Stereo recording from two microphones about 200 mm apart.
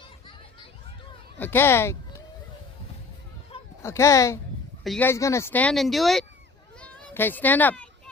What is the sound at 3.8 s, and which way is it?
Speech, 15° left (ahead or behind).